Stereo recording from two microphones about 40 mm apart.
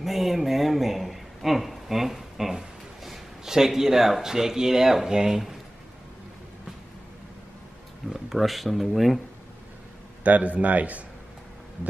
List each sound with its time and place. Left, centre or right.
0.0 s a sound: centre
8.3 s speech: centre
10.2 s a man's voice: right